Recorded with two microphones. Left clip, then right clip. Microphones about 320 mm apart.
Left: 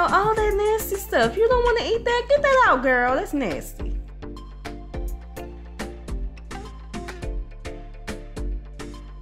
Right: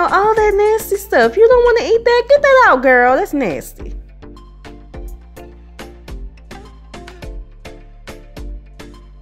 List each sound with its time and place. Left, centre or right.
0.0 s speech: centre
3.7 s music: centre
6.5 s music: centre